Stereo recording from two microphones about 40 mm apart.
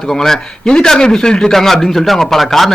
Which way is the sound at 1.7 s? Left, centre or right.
Centre.